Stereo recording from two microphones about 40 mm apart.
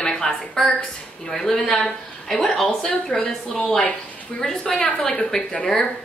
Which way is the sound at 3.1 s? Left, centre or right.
Left.